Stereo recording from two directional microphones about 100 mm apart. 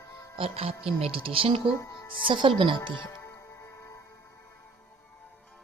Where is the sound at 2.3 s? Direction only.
55° right (ahead or behind).